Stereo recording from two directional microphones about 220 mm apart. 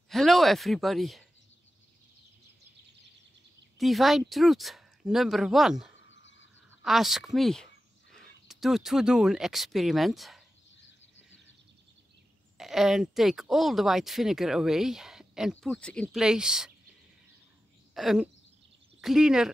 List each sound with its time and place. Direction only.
0.1 s speech: centre (ahead or behind)
3.7 s speech: centre (ahead or behind)
6.0 s a sound: 55° left (ahead or behind)
6.8 s speech: centre (ahead or behind)
12.5 s speech: centre (ahead or behind)
17.9 s speech: centre (ahead or behind)